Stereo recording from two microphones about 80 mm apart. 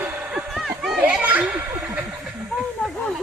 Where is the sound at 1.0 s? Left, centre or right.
Centre.